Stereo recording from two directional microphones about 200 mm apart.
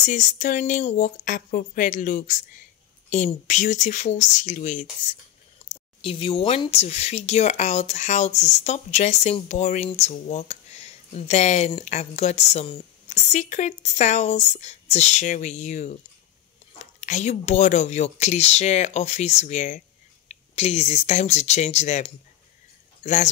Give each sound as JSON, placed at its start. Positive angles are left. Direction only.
{"t": 0.0, "sound": "speech", "side_deg": 40}
{"t": 17.0, "sound": "speech", "side_deg": 35}